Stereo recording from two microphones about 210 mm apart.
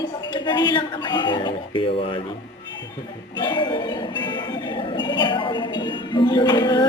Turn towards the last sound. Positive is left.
turn(degrees=20)  # may be behind; listen again after turning